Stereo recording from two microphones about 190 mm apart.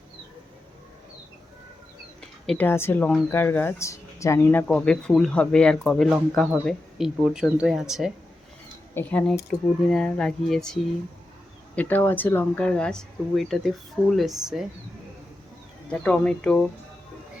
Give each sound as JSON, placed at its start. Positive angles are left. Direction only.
{"t": 2.5, "sound": "speech", "side_deg": 10}
{"t": 11.8, "sound": "speech", "side_deg": 10}
{"t": 15.9, "sound": "speech", "side_deg": 5}